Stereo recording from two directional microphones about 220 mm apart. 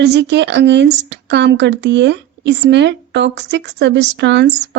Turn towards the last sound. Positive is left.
turn(degrees=-50)  # may be behind; listen again after turning